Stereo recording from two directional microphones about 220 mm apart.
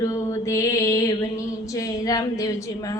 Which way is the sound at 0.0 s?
15° left (ahead or behind).